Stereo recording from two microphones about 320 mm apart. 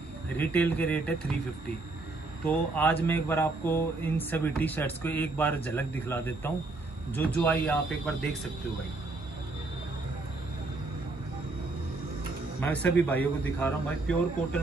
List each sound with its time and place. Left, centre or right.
0.4 s a man's voice: centre
2.4 s a man's voice: centre
12.5 s a man's voice: centre